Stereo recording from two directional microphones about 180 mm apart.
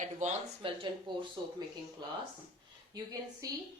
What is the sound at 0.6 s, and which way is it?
Speech, 30° right (ahead or behind).